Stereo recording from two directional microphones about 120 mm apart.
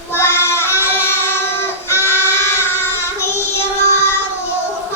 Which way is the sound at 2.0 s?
20° left (ahead or behind).